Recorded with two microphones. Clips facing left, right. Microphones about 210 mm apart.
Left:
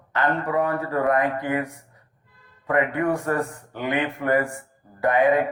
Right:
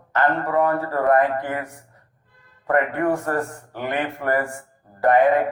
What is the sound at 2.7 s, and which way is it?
Speech, 50° right (ahead or behind).